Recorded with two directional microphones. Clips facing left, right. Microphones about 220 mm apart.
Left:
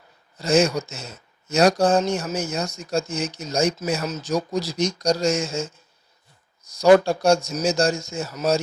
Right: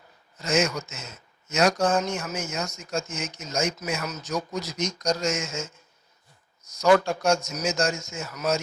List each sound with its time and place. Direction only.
0.3 s speech: 35° left (ahead or behind)